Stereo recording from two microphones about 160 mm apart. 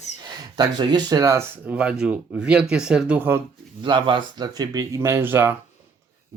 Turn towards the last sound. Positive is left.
turn(degrees=-15)  # may be behind; listen again after turning